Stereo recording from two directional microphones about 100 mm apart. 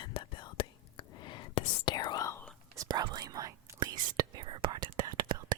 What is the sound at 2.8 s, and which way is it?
Speech, 40° right (ahead or behind).